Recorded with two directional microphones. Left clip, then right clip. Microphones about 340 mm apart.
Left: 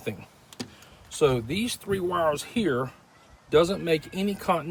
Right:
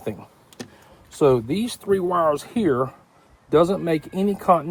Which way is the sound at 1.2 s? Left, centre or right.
Centre.